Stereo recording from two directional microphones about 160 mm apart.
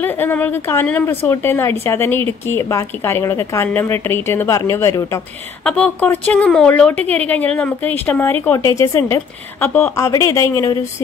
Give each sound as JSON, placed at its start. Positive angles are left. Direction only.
{"t": 0.0, "sound": "a woman's voice", "side_deg": 10}